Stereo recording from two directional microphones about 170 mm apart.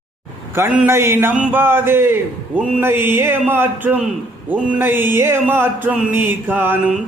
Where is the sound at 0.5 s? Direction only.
15° right (ahead or behind).